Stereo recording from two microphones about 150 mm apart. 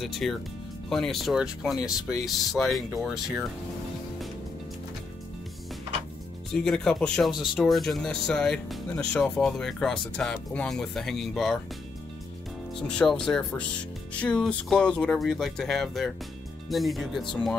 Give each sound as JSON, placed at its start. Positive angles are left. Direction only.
{"t": 0.0, "sound": "speech", "side_deg": 0}
{"t": 6.5, "sound": "speech", "side_deg": 5}
{"t": 12.7, "sound": "speech", "side_deg": 5}